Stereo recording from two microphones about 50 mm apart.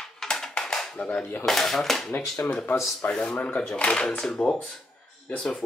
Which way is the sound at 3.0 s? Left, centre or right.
Left.